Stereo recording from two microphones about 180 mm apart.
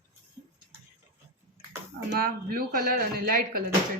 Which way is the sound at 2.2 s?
55° right (ahead or behind).